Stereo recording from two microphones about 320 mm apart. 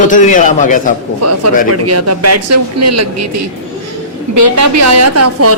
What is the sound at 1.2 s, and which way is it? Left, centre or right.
A woman's voice, right.